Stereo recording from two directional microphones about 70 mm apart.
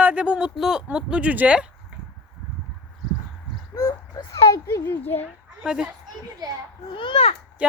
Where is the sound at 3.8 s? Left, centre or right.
Left.